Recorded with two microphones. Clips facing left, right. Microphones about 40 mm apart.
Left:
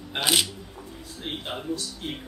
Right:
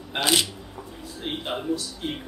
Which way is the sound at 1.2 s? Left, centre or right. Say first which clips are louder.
Right 4 dB; centre.